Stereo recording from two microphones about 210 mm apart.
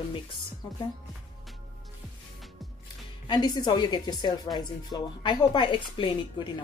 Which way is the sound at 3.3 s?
20° left (ahead or behind).